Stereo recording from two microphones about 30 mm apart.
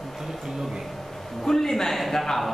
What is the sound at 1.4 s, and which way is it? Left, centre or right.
A man's voice, centre.